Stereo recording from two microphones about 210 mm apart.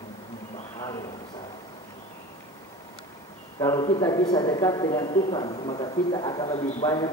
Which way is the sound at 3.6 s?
20° left (ahead or behind).